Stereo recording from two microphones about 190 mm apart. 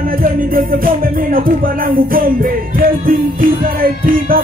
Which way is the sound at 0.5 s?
50° right (ahead or behind).